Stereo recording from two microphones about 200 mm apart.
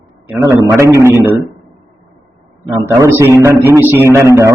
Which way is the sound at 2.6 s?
15° right (ahead or behind).